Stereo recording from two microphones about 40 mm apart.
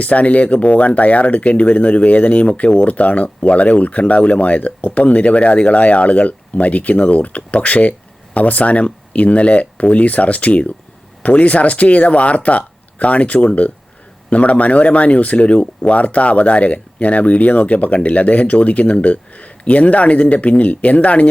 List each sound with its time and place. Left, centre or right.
0.0 s speech: left